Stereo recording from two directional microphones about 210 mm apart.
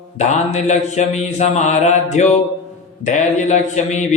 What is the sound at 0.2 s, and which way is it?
Mantra, 35° left (ahead or behind).